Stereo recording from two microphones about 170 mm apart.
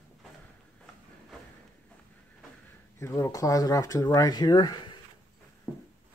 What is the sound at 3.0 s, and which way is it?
Speech, 15° left (ahead or behind).